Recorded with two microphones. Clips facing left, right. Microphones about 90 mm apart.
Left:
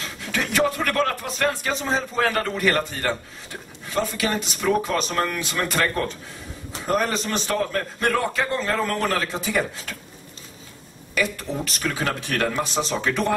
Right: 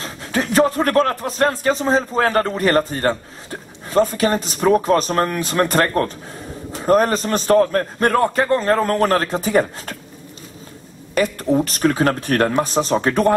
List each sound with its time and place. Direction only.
0.0 s a man's voice: 35° right (ahead or behind)
11.1 s speech: 40° right (ahead or behind)